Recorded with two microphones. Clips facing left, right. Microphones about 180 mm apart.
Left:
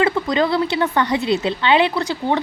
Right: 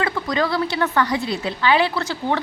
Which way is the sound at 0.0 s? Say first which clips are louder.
Left 4 dB; 25° left (ahead or behind).